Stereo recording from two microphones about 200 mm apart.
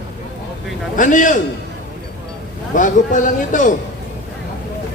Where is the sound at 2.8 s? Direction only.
40° left (ahead or behind).